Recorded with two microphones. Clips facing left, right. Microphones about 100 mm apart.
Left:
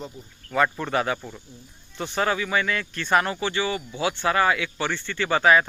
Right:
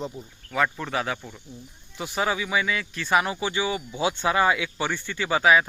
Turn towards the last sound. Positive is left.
turn(degrees=-5)  # may be behind; listen again after turning